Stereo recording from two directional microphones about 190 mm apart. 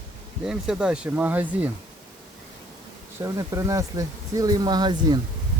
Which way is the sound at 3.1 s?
15° right (ahead or behind).